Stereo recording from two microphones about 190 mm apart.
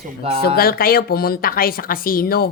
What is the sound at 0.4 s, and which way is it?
A woman's voice, 55° left (ahead or behind).